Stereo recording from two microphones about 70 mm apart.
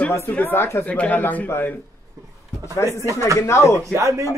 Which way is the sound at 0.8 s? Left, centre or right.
Left.